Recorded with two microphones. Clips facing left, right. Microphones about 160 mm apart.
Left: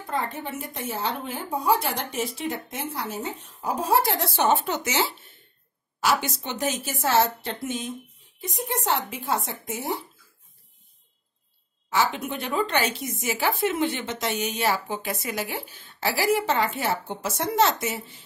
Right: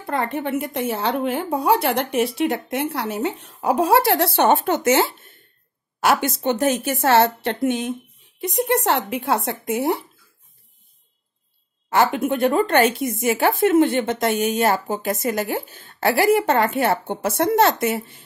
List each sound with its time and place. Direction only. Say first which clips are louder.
0.0 s a woman's voice: right 6 dB; 65° right (ahead or behind)
11.9 s speech: right 7 dB; 55° right (ahead or behind)